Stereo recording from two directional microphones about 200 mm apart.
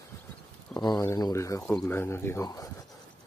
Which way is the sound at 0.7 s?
20° left (ahead or behind).